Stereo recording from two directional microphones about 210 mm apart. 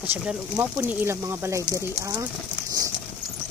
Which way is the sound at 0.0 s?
10° right (ahead or behind).